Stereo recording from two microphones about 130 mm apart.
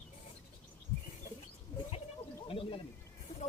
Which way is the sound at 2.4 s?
45° left (ahead or behind).